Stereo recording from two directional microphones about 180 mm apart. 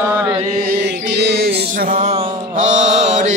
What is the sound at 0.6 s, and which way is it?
Mantra, 65° right (ahead or behind).